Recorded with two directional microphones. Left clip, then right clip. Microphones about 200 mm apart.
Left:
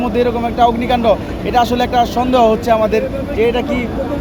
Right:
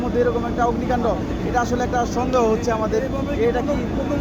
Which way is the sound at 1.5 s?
55° left (ahead or behind).